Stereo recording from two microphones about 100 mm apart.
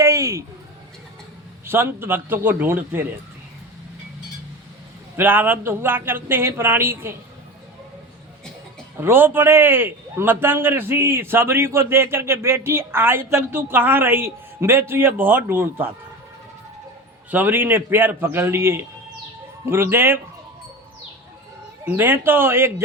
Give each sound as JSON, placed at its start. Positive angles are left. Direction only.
{"t": 0.0, "sound": "a sound", "side_deg": -35}
{"t": 1.6, "sound": "a man's voice", "side_deg": -20}
{"t": 5.1, "sound": "a man's voice", "side_deg": -20}
{"t": 9.0, "sound": "a man's voice", "side_deg": -20}
{"t": 17.3, "sound": "a man's voice", "side_deg": -20}
{"t": 21.8, "sound": "a man's voice", "side_deg": -20}